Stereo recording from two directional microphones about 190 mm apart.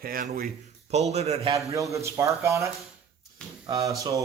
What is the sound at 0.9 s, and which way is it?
Speech, 35° right (ahead or behind).